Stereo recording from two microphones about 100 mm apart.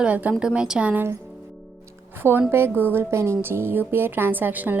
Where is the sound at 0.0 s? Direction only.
15° right (ahead or behind).